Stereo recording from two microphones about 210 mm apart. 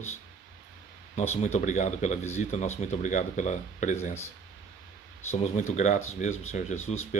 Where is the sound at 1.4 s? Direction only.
35° left (ahead or behind).